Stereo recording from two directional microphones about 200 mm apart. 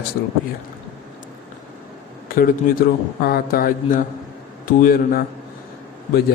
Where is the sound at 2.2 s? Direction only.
45° left (ahead or behind).